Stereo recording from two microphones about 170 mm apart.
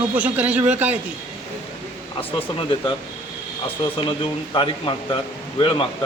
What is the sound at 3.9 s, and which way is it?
Speech, 30° left (ahead or behind).